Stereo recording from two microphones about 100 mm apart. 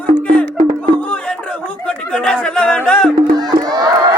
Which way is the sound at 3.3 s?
40° right (ahead or behind).